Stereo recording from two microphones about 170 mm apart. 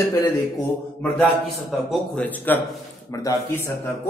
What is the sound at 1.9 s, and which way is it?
A man's voice, 10° left (ahead or behind).